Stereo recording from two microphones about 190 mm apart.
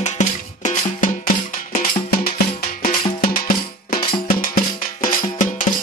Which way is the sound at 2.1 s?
50° left (ahead or behind).